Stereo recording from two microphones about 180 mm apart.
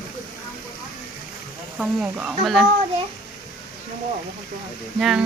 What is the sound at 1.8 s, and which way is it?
Speech, 5° right (ahead or behind).